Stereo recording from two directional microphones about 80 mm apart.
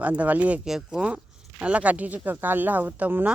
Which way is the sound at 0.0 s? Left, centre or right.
Centre.